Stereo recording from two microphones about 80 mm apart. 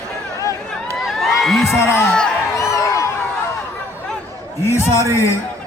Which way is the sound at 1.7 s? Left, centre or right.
Left.